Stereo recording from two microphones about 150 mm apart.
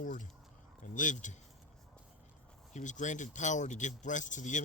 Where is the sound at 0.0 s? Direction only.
60° left (ahead or behind).